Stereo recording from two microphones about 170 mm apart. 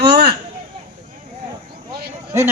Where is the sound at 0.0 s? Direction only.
70° right (ahead or behind).